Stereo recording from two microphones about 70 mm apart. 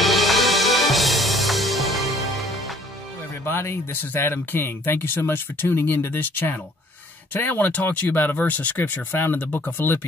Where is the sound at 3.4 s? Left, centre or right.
Left.